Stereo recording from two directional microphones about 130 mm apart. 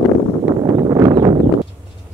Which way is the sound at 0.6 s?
30° right (ahead or behind).